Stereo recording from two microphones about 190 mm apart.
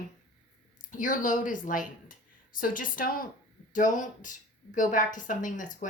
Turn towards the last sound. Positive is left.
turn(degrees=45)  # may be behind; listen again after turning